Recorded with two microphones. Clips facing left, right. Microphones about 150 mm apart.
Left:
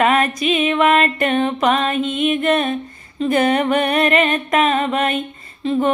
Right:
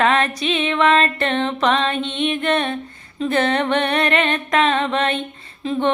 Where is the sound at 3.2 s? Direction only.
10° left (ahead or behind).